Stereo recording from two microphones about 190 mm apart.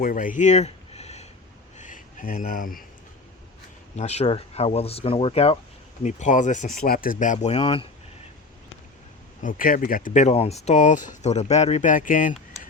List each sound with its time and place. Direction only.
0.0 s a sound: 45° left (ahead or behind)
3.9 s speech: 35° left (ahead or behind)
7.6 s speech: 30° left (ahead or behind)
9.4 s speech: 45° left (ahead or behind)